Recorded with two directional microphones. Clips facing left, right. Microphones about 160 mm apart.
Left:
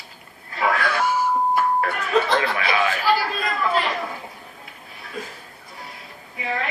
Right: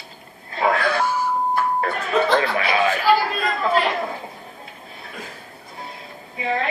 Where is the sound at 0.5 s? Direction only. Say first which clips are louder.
Right 2 dB; 25° right (ahead or behind).